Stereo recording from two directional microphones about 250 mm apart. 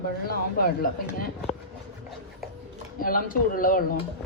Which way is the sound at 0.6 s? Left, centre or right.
Left.